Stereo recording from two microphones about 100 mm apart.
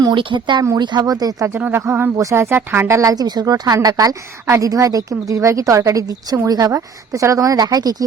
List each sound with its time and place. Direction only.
0.0 s a woman's voice: 55° right (ahead or behind)
1.5 s a woman's voice: 20° right (ahead or behind); by 7.9 s 40° right (ahead or behind)